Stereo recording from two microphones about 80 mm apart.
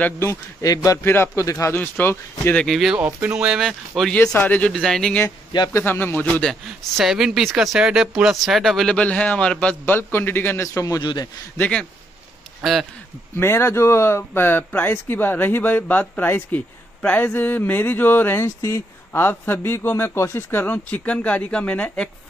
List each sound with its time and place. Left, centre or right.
0.2 s speech: left
1.0 s speech: left
1.4 s speech: left
1.8 s speech: left
2.5 s speech: centre
3.6 s speech: centre
4.1 s a man's voice: centre
5.7 s speech: left
7.0 s speech: centre
8.9 s a man's voice: centre
10.6 s speech: left
11.0 s a man's voice: left
13.4 s speech: left; by 22.1 s centre